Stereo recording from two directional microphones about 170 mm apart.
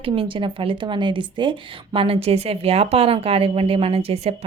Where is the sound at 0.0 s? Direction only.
30° right (ahead or behind).